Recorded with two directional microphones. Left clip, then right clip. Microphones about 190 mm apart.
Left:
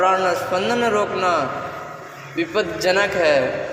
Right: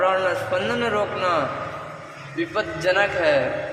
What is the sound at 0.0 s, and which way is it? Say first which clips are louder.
A man's voice: left 3 dB; 15° left (ahead or behind).